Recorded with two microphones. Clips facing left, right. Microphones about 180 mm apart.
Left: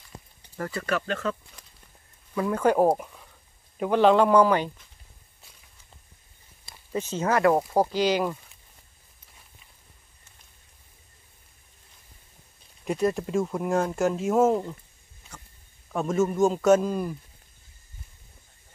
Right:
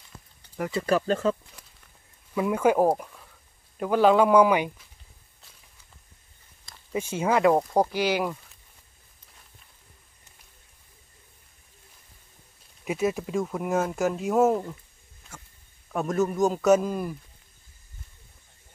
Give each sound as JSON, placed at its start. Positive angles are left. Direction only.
{"t": 0.8, "sound": "speech", "side_deg": -35}
{"t": 2.3, "sound": "speech", "side_deg": -10}
{"t": 6.9, "sound": "speech", "side_deg": -10}
{"t": 7.5, "sound": "speech", "side_deg": 5}
{"t": 7.9, "sound": "speech", "side_deg": -10}
{"t": 12.8, "sound": "speech", "side_deg": -5}
{"t": 15.9, "sound": "speech", "side_deg": 0}